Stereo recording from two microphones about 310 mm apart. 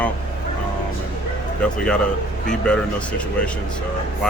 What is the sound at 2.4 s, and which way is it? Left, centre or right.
Speech, centre.